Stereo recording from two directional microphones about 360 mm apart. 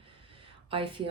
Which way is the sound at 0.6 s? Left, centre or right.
Centre.